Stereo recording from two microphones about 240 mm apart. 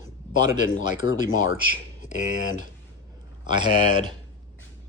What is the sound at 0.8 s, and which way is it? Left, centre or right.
Speech, left.